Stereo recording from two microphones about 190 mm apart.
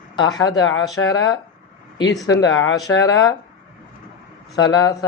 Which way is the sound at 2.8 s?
20° left (ahead or behind).